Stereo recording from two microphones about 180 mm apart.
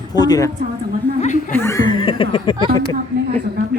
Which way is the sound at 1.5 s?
15° left (ahead or behind).